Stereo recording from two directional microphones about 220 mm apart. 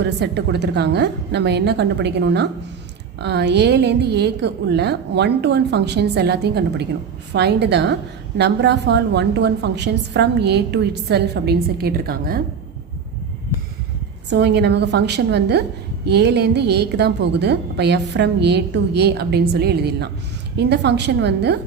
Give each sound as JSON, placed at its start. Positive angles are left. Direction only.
{"t": 0.0, "sound": "a woman's voice", "side_deg": -50}
{"t": 14.3, "sound": "a woman's voice", "side_deg": -50}